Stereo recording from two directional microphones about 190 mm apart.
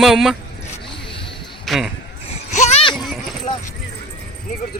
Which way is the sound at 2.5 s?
35° left (ahead or behind).